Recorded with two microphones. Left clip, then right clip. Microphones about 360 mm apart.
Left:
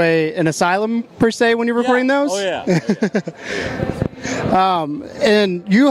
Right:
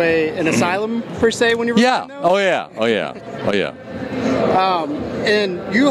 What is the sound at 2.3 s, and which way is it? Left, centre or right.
Speech, right.